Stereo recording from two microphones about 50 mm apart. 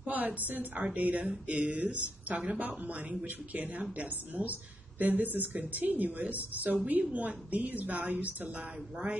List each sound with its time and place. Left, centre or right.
0.0 s speech: right